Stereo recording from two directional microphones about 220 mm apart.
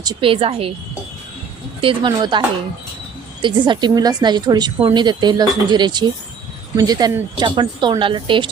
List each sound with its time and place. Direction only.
0.0 s a woman's voice: 20° right (ahead or behind)
1.8 s a woman's voice: 20° right (ahead or behind)
3.4 s a woman's voice: 20° right (ahead or behind)